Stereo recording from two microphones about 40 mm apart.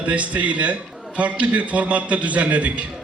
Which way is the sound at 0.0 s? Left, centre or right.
Right.